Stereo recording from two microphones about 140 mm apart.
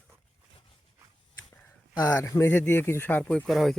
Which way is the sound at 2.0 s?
20° left (ahead or behind).